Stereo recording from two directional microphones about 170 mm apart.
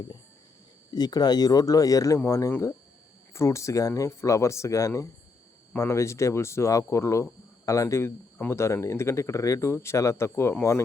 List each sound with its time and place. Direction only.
0.9 s speech: 25° left (ahead or behind)